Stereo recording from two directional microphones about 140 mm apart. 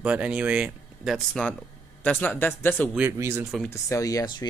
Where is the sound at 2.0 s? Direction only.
10° left (ahead or behind).